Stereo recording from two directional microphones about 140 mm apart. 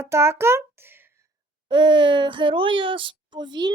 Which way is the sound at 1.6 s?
35° right (ahead or behind).